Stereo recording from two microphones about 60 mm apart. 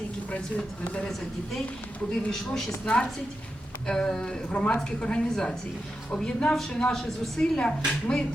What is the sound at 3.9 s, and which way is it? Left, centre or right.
A woman's voice, centre.